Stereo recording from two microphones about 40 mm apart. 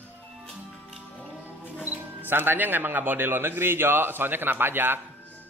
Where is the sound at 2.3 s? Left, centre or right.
Right.